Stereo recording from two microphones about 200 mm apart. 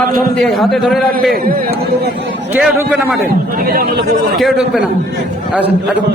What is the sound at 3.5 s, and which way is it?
Speech, 50° right (ahead or behind).